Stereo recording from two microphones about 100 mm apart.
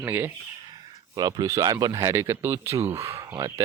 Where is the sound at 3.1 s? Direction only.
35° right (ahead or behind).